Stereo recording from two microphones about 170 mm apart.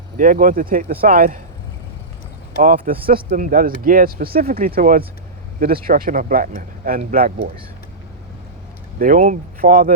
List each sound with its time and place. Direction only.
0.2 s speech: 50° right (ahead or behind)
2.6 s speech: 55° right (ahead or behind)
9.0 s speech: 50° right (ahead or behind)